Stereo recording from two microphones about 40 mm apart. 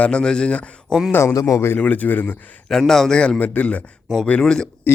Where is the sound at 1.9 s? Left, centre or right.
Left.